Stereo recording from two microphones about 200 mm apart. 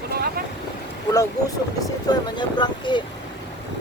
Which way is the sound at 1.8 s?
20° left (ahead or behind).